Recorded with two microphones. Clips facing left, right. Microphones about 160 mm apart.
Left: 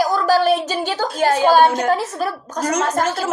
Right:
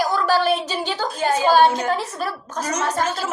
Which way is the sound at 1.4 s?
45° left (ahead or behind).